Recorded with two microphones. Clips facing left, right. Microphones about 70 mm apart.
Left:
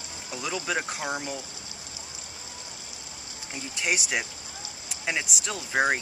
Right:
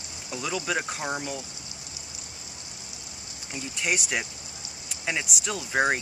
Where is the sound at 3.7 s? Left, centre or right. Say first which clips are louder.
Even; centre.